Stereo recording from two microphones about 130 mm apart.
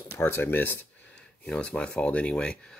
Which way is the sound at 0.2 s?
20° left (ahead or behind).